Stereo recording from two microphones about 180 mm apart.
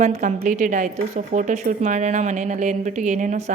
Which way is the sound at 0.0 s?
40° right (ahead or behind).